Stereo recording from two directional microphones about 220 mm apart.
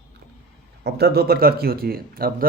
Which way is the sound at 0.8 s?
45° right (ahead or behind).